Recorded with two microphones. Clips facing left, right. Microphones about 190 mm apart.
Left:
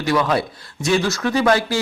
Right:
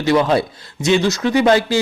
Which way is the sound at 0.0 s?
25° right (ahead or behind).